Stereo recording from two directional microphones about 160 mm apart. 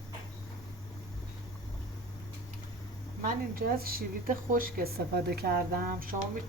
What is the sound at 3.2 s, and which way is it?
A woman's voice, 65° right (ahead or behind).